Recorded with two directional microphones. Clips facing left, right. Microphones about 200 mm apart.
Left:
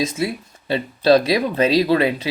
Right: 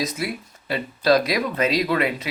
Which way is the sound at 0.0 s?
25° left (ahead or behind).